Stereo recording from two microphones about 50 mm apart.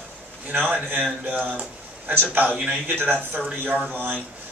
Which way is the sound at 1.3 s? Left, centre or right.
Right.